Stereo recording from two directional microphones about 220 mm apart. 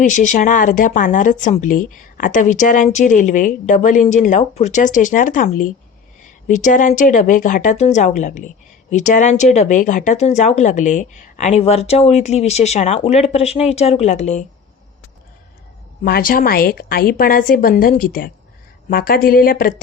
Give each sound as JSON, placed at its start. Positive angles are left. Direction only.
{"t": 0.0, "sound": "a woman's voice", "side_deg": 35}
{"t": 16.0, "sound": "a woman's voice", "side_deg": 40}